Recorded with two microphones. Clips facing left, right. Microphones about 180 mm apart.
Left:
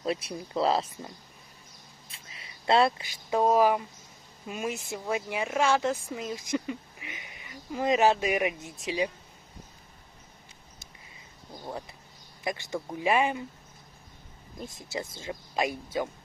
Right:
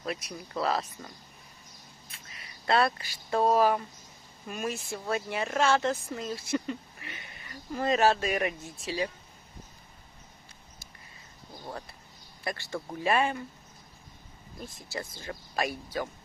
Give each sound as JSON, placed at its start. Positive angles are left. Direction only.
{"t": 0.0, "sound": "speech", "side_deg": 30}
{"t": 12.4, "sound": "speech", "side_deg": 20}
{"t": 14.6, "sound": "speech", "side_deg": 20}